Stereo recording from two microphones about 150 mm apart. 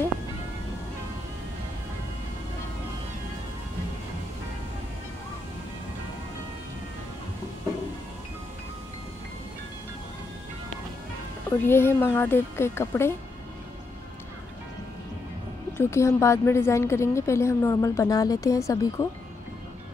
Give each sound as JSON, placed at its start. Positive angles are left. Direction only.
{"t": 11.6, "sound": "speech", "side_deg": 15}
{"t": 15.8, "sound": "a woman's voice", "side_deg": 20}